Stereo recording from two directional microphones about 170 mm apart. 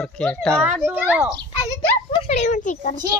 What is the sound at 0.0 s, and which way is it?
Speech, 5° left (ahead or behind).